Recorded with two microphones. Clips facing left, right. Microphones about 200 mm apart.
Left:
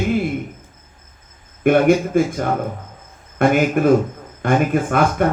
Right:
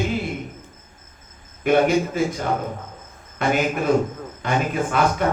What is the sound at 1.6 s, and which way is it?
Speech, 55° left (ahead or behind).